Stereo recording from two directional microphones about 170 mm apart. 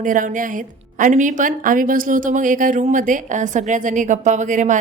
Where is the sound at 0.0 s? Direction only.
50° right (ahead or behind).